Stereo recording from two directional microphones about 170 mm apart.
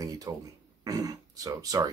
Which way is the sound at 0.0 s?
20° right (ahead or behind).